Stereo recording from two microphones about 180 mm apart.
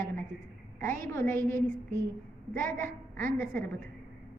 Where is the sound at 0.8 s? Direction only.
15° left (ahead or behind).